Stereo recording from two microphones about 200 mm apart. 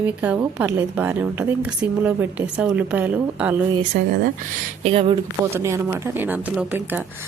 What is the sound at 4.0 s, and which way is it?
Speech, 35° right (ahead or behind).